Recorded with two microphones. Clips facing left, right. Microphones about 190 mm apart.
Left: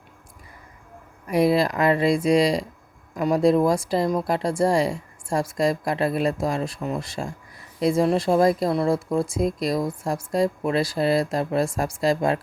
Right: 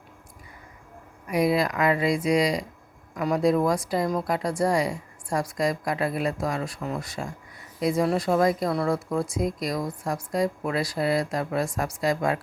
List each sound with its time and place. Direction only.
1.3 s speech: 30° left (ahead or behind)